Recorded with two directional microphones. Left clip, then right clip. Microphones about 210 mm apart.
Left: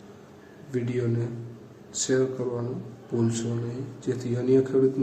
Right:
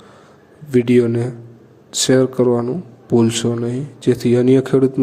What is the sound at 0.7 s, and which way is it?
Speech, 45° right (ahead or behind).